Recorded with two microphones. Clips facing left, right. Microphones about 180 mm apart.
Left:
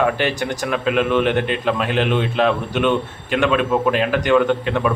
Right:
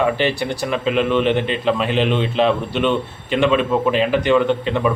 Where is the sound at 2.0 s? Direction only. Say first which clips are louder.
Right 1 dB; 5° left (ahead or behind).